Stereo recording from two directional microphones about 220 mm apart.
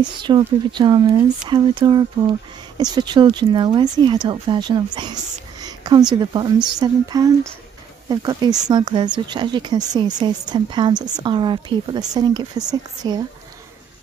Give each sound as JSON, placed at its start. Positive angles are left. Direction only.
{"t": 0.2, "sound": "speech", "side_deg": -20}